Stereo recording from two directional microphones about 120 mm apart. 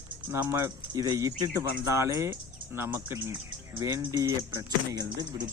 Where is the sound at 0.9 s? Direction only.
30° right (ahead or behind).